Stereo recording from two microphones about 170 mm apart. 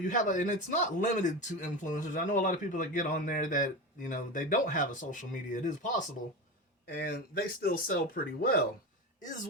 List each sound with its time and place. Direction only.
0.0 s speech: 50° left (ahead or behind)
6.8 s speech: 65° left (ahead or behind)